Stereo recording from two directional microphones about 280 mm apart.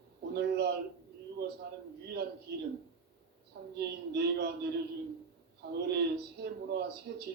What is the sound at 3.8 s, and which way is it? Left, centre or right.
Speech, right.